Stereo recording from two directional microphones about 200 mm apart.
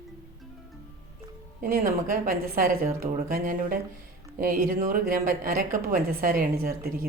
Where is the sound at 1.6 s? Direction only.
45° right (ahead or behind).